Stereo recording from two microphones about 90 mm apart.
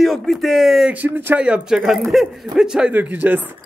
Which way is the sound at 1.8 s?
Centre (ahead or behind).